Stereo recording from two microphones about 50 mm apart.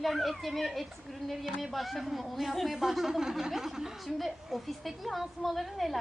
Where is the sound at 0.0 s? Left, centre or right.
Centre.